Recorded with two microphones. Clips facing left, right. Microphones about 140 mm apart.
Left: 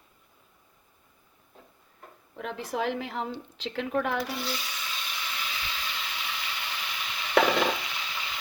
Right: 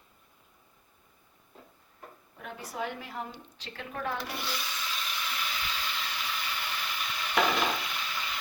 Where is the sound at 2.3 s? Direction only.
90° left.